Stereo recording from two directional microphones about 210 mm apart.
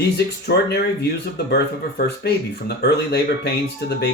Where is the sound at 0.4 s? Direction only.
50° left (ahead or behind).